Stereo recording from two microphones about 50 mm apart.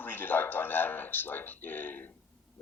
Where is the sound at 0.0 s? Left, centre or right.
Left.